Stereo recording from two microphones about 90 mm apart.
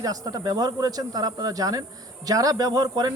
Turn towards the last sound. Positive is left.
turn(degrees=-45)  # may be behind; listen again after turning